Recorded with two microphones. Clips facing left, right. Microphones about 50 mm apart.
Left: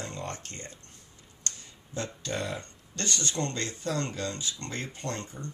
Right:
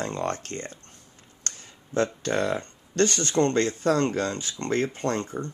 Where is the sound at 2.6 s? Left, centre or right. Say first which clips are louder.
Right 14 dB; right.